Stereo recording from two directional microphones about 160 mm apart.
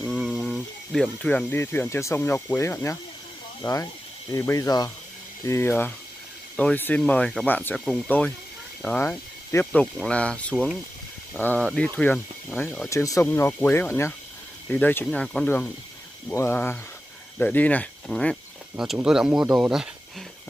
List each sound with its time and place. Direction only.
0.0 s speech: centre (ahead or behind)